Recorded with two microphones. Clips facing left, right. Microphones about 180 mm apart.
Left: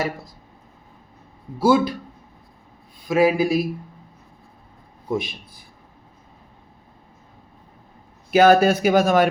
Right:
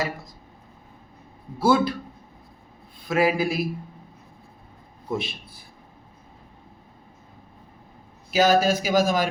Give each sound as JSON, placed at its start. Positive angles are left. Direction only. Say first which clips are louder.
{"t": 1.5, "sound": "speech", "louder": "left 3 dB", "side_deg": 15}
{"t": 3.1, "sound": "speech", "louder": "left 4 dB", "side_deg": 15}
{"t": 5.0, "sound": "a man's voice", "louder": "left 4 dB", "side_deg": 15}
{"t": 8.3, "sound": "speech", "louder": "left 5 dB", "side_deg": 60}